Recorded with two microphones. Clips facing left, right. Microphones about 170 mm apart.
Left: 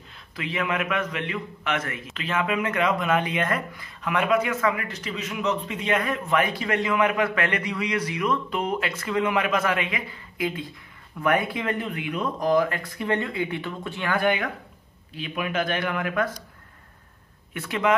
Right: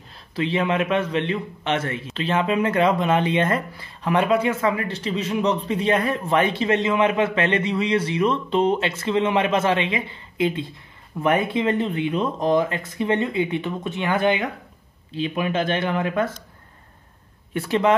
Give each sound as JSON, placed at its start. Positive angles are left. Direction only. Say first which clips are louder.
{"t": 0.4, "sound": "a man's voice", "louder": "right 6 dB", "side_deg": -30}
{"t": 17.6, "sound": "speech", "louder": "right 5 dB", "side_deg": -30}